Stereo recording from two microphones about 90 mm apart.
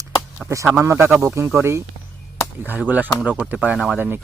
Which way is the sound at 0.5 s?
35° right (ahead or behind).